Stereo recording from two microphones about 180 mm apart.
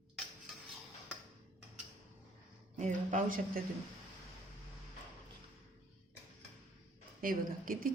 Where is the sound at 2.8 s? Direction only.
45° right (ahead or behind).